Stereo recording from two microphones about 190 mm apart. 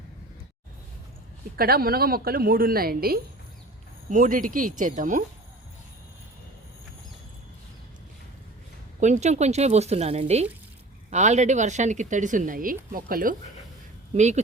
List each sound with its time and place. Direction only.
1.5 s a woman's voice: 50° right (ahead or behind)
9.0 s speech: 40° right (ahead or behind)
14.1 s speech: 35° right (ahead or behind)